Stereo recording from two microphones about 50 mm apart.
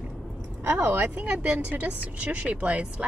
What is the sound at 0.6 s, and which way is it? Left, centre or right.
Speech, right.